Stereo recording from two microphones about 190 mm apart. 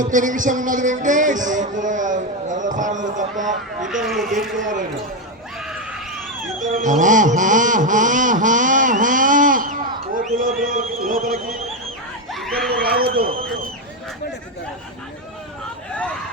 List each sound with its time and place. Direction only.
0.0 s speech: 40° right (ahead or behind)
3.8 s a man's voice: centre (ahead or behind)
4.5 s speech: 45° right (ahead or behind)
6.7 s a sound: 40° right (ahead or behind)
12.3 s a sound: centre (ahead or behind)
12.8 s speech: 55° right (ahead or behind)